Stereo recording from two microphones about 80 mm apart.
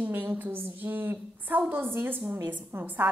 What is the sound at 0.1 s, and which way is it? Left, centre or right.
A woman's voice, right.